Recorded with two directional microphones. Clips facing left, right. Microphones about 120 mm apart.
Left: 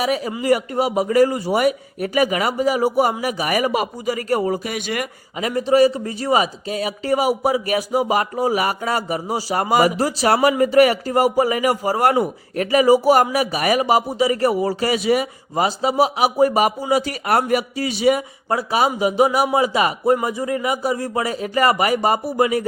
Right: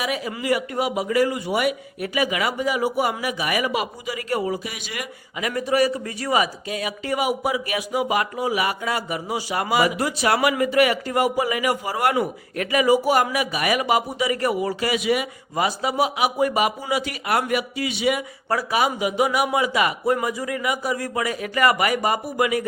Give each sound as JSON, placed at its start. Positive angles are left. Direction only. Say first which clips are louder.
{"t": 0.0, "sound": "a man's voice", "louder": "left 5 dB", "side_deg": 35}
{"t": 5.4, "sound": "a man's voice", "louder": "left 6 dB", "side_deg": 30}
{"t": 18.4, "sound": "a man's voice", "louder": "left 2 dB", "side_deg": 25}